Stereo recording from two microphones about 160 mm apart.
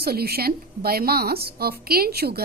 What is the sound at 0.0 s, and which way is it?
A woman's voice, 75° right (ahead or behind).